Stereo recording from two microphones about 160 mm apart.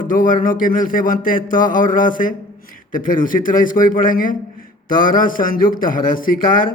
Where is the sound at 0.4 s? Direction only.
55° left (ahead or behind).